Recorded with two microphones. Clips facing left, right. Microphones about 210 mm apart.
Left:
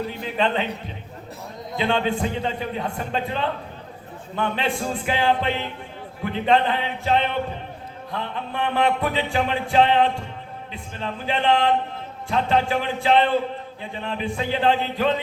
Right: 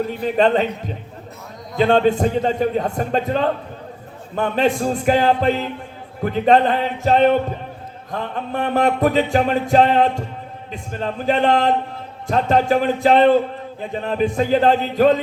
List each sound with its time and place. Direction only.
0.2 s music: 45° right (ahead or behind)
1.7 s music: 45° right (ahead or behind)